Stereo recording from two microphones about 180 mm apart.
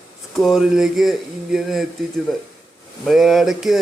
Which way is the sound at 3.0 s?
Centre (ahead or behind).